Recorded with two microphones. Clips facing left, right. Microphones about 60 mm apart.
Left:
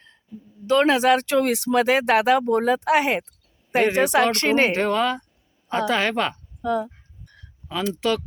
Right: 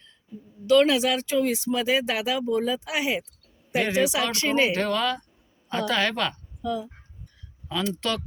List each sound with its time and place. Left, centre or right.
0.7 s speech: left
4.7 s speech: left
6.6 s fowl: left
7.7 s speech: centre